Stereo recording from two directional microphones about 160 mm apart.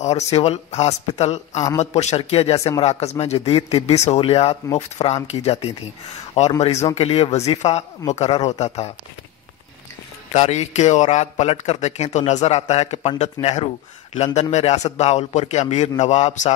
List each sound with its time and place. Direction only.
0.0 s a man's voice: 40° left (ahead or behind)
2.5 s speech: 20° left (ahead or behind)
2.8 s a man's voice: 40° left (ahead or behind)
10.3 s a man's voice: 45° left (ahead or behind)